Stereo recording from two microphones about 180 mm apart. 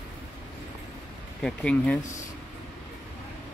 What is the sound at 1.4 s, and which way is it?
Speech, 5° left (ahead or behind).